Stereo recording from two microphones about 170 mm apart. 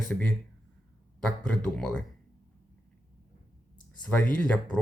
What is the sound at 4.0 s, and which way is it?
Speech, 5° left (ahead or behind).